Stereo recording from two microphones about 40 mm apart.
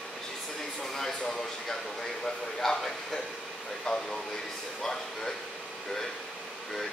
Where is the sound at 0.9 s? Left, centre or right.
Centre.